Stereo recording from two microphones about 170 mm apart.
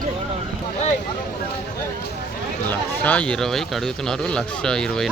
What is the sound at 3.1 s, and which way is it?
Speech, 5° left (ahead or behind).